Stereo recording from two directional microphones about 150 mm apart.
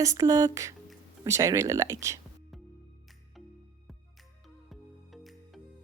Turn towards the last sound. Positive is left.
turn(degrees=0)  # may be behind; listen again after turning